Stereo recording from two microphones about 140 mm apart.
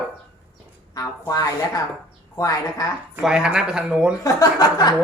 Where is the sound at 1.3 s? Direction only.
25° left (ahead or behind).